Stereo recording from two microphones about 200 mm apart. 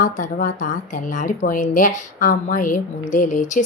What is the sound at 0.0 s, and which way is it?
Speech, 40° left (ahead or behind).